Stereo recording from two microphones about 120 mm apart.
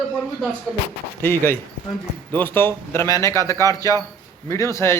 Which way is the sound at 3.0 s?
30° left (ahead or behind).